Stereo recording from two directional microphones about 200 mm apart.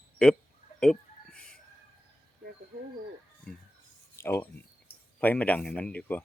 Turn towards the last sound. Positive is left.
turn(degrees=5)  # may be behind; listen again after turning